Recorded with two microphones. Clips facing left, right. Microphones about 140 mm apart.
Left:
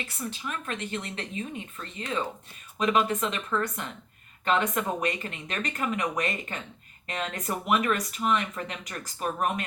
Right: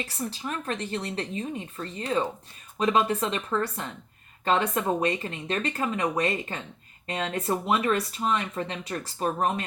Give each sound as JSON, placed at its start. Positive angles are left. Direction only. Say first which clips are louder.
{"t": 0.0, "sound": "a woman's voice", "louder": "right 3 dB", "side_deg": -35}